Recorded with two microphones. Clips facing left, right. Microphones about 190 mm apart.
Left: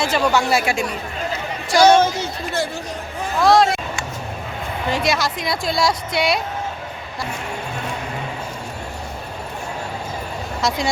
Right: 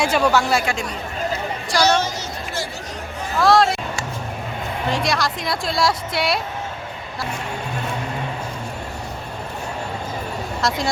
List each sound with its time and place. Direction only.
0.0 s speech: 5° right (ahead or behind)
0.6 s speech: 10° left (ahead or behind)
1.7 s a sound: 50° left (ahead or behind)
3.4 s speech: centre (ahead or behind)
4.9 s speech: centre (ahead or behind)
10.6 s speech: centre (ahead or behind)